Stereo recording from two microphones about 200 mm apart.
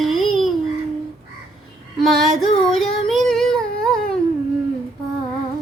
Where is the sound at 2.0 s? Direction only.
Centre (ahead or behind).